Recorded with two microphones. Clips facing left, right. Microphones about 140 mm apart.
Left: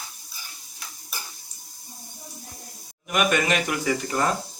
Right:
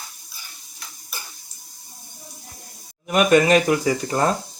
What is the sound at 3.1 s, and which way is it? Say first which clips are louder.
Speech: right 7 dB; 35° right (ahead or behind).